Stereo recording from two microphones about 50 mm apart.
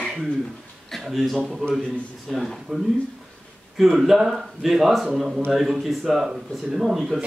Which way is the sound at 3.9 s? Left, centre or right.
Centre.